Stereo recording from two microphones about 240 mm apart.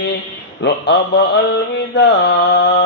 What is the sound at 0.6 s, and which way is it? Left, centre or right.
Mantra, left.